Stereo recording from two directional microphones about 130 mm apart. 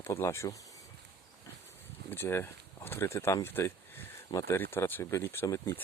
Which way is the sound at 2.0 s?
15° left (ahead or behind).